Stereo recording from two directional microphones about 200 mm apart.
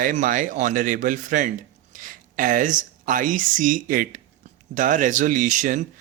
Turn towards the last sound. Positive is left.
turn(degrees=-40)  # may be behind; listen again after turning